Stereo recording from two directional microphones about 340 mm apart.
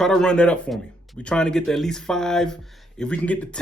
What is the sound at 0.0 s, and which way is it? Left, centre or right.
Speech, centre.